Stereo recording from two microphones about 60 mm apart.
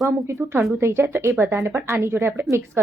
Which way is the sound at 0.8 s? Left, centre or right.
Right.